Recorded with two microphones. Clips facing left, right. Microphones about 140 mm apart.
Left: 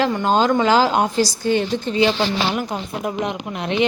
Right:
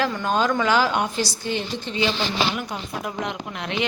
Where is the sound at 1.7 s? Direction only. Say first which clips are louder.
Left 7 dB; 55° left (ahead or behind).